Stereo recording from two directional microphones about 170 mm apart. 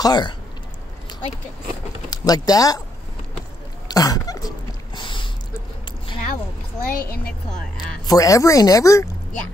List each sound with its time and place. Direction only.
0.0 s speech: 25° left (ahead or behind)
2.0 s speech: 20° left (ahead or behind)
3.9 s a sound: 20° left (ahead or behind)
6.8 s a woman's voice: 60° left (ahead or behind)
7.7 s speech: 20° left (ahead or behind)